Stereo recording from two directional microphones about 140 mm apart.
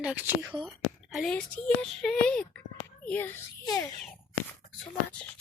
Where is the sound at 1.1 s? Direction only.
5° left (ahead or behind).